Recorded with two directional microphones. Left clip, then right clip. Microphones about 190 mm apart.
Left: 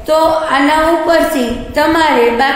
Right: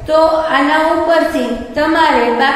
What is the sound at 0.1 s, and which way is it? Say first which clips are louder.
A woman's voice: even; 55° left (ahead or behind).